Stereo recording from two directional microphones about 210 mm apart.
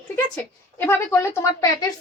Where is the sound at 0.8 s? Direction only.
10° left (ahead or behind).